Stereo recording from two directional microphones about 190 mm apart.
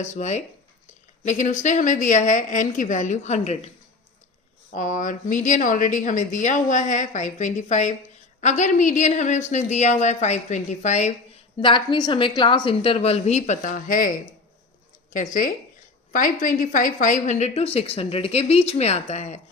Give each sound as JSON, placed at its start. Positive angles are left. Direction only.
{"t": 0.0, "sound": "a woman's voice", "side_deg": 35}
{"t": 4.7, "sound": "a woman's voice", "side_deg": 40}
{"t": 11.6, "sound": "a woman's voice", "side_deg": 25}
{"t": 15.1, "sound": "a woman's voice", "side_deg": 45}